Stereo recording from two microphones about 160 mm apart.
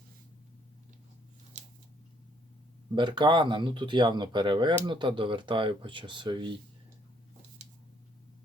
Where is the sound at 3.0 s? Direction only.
30° right (ahead or behind).